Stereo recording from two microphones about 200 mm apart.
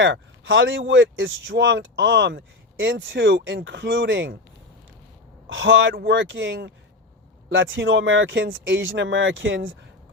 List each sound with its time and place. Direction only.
0.0 s speech: 70° right (ahead or behind)
5.5 s speech: 75° right (ahead or behind)